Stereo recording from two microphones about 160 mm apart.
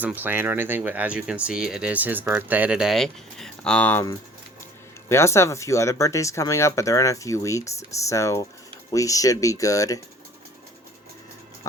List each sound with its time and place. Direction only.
0.0 s speech: 10° right (ahead or behind); by 4.0 s 10° left (ahead or behind)
5.0 s speech: 15° left (ahead or behind)